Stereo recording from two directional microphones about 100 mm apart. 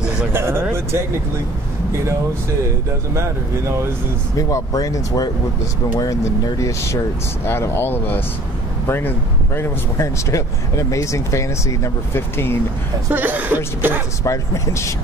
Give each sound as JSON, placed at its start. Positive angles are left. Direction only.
{"t": 0.3, "sound": "speech", "side_deg": -25}
{"t": 4.4, "sound": "speech", "side_deg": 35}
{"t": 13.1, "sound": "speech", "side_deg": -15}
{"t": 14.2, "sound": "speech", "side_deg": 30}